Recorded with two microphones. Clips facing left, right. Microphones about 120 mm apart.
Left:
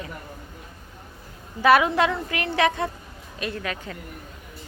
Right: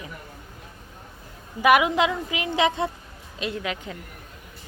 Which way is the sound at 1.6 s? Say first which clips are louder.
Left 1 dB; 15° right (ahead or behind).